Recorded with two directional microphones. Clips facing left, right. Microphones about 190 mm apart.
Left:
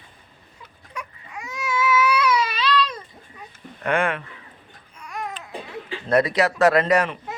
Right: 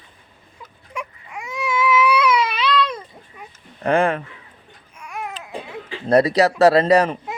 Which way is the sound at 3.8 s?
35° right (ahead or behind).